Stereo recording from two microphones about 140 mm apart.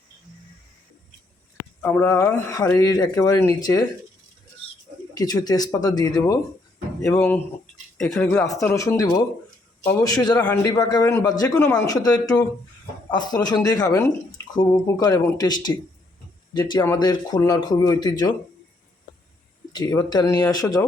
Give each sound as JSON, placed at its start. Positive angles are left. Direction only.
{"t": 1.8, "sound": "a man's voice", "side_deg": 15}
{"t": 5.1, "sound": "speech", "side_deg": 25}
{"t": 7.0, "sound": "a man's voice", "side_deg": 10}
{"t": 8.6, "sound": "speech", "side_deg": 20}
{"t": 10.3, "sound": "a man's voice", "side_deg": 15}
{"t": 10.8, "sound": "speech", "side_deg": 25}
{"t": 19.7, "sound": "speech", "side_deg": 30}